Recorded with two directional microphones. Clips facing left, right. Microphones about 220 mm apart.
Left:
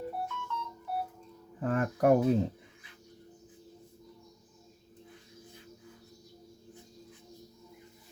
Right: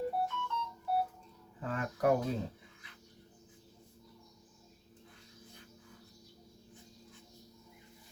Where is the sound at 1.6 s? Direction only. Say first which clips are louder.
Left 5 dB; 55° left (ahead or behind).